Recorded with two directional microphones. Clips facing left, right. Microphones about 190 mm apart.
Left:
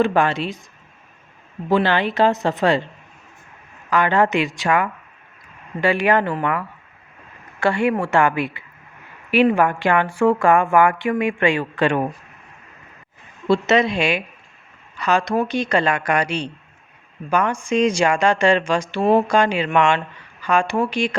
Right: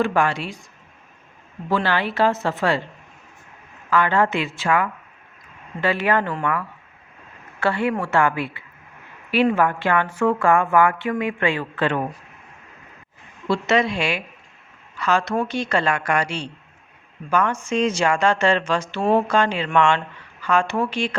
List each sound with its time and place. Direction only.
0.0 s speech: 20° left (ahead or behind)
1.7 s speech: 20° left (ahead or behind)
3.8 s speech: 15° left (ahead or behind)
7.6 s speech: 15° left (ahead or behind)
13.5 s speech: 20° left (ahead or behind)